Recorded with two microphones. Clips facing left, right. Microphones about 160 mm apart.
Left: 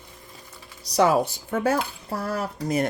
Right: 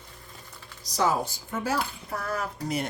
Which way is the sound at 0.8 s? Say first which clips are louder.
Left 6 dB; 65° left (ahead or behind).